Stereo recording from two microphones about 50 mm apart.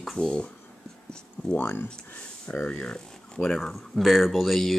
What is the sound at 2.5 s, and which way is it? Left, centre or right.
Speech, left.